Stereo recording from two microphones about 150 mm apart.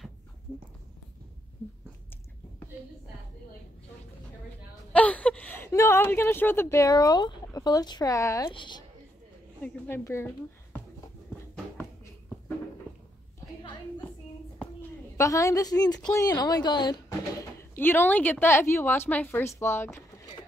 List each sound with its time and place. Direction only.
1.6 s a sound: 15° left (ahead or behind)
4.9 s a woman's voice: 10° left (ahead or behind); by 8.8 s 30° left (ahead or behind)
9.6 s speech: 15° left (ahead or behind)
15.1 s speech: 20° left (ahead or behind)
17.6 s a woman's voice: 15° left (ahead or behind)